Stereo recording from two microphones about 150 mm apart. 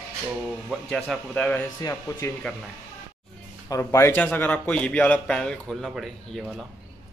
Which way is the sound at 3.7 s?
20° left (ahead or behind).